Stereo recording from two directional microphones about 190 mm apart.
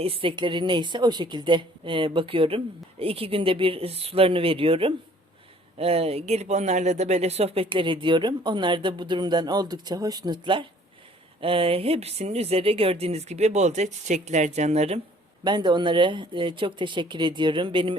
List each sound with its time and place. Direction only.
0.0 s speech: 30° right (ahead or behind)
15.4 s speech: 25° right (ahead or behind)